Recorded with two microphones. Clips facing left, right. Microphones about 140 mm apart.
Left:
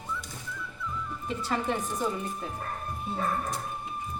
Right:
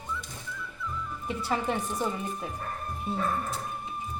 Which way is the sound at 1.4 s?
10° right (ahead or behind).